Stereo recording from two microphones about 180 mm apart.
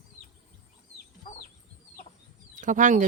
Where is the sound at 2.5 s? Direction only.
45° right (ahead or behind).